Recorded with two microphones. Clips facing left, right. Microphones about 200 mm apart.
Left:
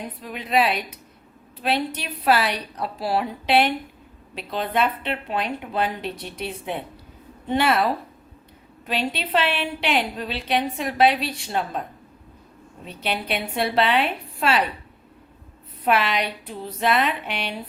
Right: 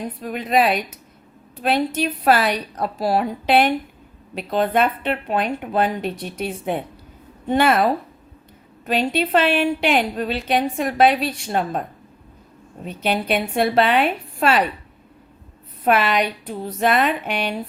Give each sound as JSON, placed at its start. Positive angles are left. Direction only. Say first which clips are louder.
{"t": 0.2, "sound": "a woman's voice", "louder": "right 3 dB", "side_deg": -45}
{"t": 8.9, "sound": "a woman's voice", "louder": "right 6 dB", "side_deg": -45}
{"t": 12.8, "sound": "a woman's voice", "louder": "right 6 dB", "side_deg": -45}
{"t": 15.8, "sound": "a woman's voice", "louder": "right 4 dB", "side_deg": -50}